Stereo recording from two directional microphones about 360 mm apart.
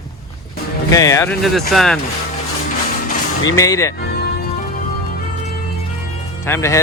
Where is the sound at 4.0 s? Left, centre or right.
Left.